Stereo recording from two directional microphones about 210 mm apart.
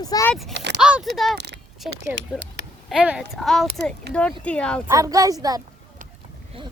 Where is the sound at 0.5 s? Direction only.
55° right (ahead or behind).